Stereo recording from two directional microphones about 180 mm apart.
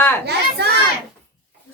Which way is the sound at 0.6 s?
65° right (ahead or behind).